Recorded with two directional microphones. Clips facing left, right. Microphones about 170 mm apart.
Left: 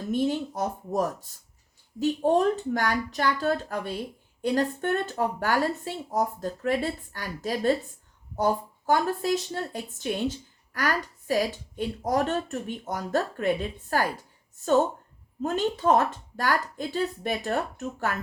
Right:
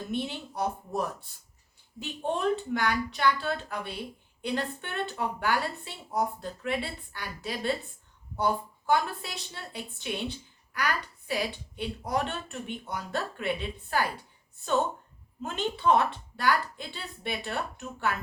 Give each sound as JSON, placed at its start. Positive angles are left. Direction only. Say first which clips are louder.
{"t": 0.1, "sound": "a woman's voice", "louder": "left 10 dB", "side_deg": 45}
{"t": 15.4, "sound": "a woman's voice", "louder": "left 6 dB", "side_deg": 40}